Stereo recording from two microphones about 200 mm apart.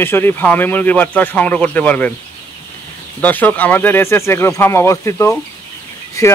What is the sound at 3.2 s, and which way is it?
Speech, 10° left (ahead or behind).